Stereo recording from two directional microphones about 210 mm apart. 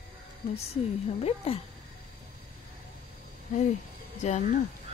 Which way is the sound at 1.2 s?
30° left (ahead or behind).